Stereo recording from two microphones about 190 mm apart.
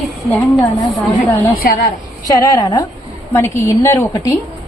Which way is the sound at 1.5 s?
50° left (ahead or behind).